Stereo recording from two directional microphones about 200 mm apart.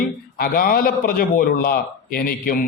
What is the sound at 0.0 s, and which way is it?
A man's voice, 45° left (ahead or behind).